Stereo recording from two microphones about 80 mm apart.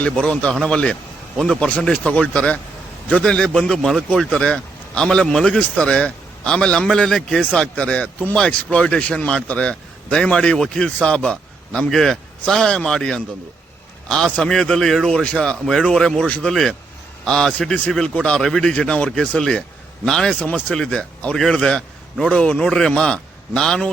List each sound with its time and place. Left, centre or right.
0.0 s a man's voice: centre
1.6 s a man's voice: centre
4.1 s a man's voice: centre